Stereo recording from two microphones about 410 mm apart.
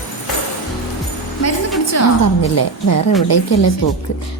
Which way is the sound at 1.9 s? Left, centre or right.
Left.